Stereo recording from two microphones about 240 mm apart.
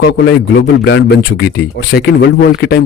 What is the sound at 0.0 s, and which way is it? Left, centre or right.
Speech, left.